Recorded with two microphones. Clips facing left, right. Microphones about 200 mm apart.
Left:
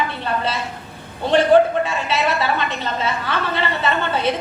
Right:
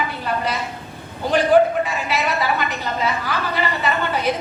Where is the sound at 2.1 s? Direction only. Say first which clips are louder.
Left 1 dB; 25° left (ahead or behind).